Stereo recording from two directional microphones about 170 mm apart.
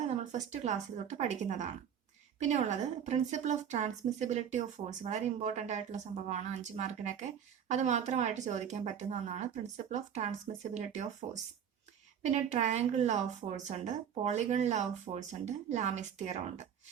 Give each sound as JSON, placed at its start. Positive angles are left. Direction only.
{"t": 0.0, "sound": "speech", "side_deg": -45}
{"t": 12.2, "sound": "speech", "side_deg": -40}